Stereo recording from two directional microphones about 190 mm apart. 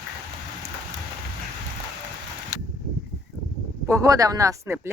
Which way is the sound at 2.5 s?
15° left (ahead or behind).